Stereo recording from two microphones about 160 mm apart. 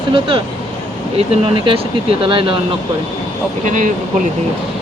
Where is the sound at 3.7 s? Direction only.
55° right (ahead or behind).